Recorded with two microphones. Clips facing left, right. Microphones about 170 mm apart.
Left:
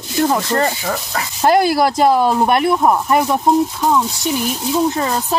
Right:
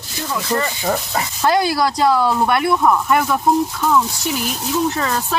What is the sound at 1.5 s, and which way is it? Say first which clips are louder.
Speech: left 4 dB; 50° left (ahead or behind).